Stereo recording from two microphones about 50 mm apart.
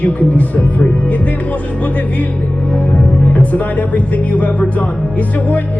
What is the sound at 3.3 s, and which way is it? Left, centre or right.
Speech, left.